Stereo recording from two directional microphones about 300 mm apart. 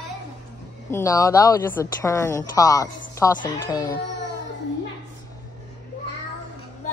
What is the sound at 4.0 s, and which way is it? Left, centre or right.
Music, left.